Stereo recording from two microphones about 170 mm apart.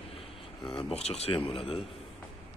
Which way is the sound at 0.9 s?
40° left (ahead or behind).